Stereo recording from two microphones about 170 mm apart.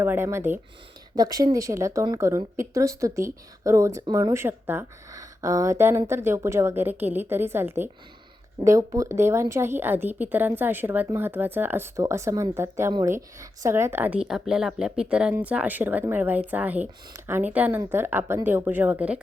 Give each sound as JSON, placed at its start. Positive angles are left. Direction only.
{"t": 0.0, "sound": "a woman's voice", "side_deg": -15}